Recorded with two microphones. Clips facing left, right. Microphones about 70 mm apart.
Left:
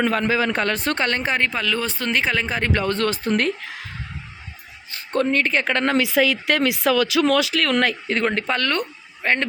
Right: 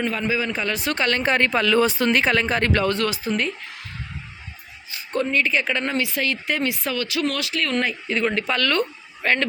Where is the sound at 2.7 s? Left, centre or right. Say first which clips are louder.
Left 1 dB; left.